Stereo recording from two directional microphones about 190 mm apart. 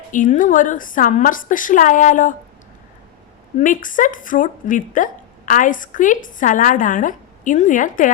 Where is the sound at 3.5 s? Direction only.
45° left (ahead or behind).